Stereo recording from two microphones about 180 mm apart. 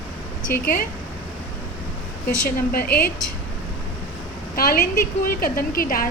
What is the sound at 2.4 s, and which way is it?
Speech, 55° left (ahead or behind).